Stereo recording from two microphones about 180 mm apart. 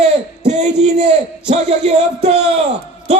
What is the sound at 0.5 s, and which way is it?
A man's voice, 40° right (ahead or behind).